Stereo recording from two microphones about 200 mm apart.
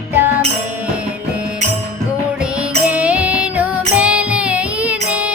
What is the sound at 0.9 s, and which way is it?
Music, 5° right (ahead or behind).